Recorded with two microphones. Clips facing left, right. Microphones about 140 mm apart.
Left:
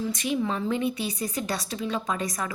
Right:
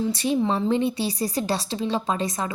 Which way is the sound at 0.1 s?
30° right (ahead or behind).